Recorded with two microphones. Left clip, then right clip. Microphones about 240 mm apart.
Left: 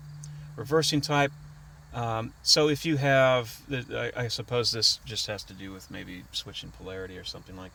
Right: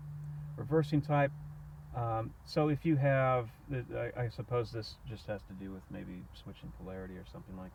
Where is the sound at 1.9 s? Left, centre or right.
Left.